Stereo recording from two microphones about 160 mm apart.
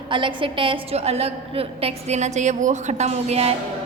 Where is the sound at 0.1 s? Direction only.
30° right (ahead or behind).